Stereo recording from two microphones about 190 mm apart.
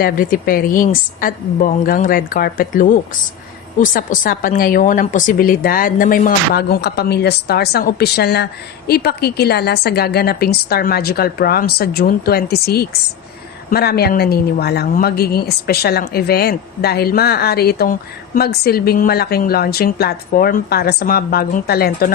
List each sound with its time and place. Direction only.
0.0 s a woman's voice: 45° left (ahead or behind)